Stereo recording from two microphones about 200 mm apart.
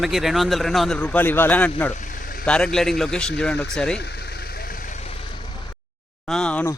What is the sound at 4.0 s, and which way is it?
Vehicle, 55° left (ahead or behind).